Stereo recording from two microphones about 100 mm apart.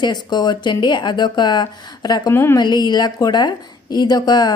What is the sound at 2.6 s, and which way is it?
A woman's voice, 45° left (ahead or behind).